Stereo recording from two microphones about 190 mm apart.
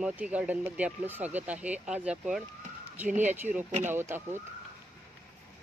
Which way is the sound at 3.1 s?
40° right (ahead or behind).